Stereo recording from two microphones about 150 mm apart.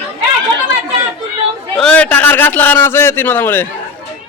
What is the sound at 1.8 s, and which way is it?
A man's voice, 5° left (ahead or behind).